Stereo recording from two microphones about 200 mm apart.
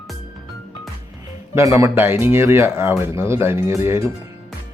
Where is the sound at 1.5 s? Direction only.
15° right (ahead or behind).